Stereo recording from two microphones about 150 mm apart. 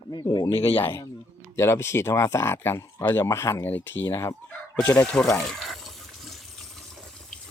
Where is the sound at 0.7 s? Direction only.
15° left (ahead or behind).